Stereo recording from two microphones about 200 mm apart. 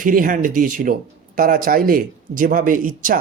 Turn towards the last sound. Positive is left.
turn(degrees=-40)  # may be behind; listen again after turning